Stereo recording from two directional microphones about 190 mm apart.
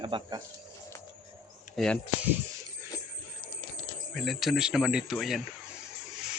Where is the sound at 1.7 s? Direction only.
Centre (ahead or behind).